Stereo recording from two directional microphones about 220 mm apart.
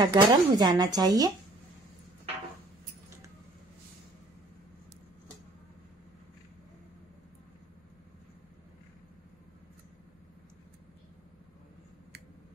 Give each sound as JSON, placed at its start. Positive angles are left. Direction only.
{"t": 0.0, "sound": "speech", "side_deg": -20}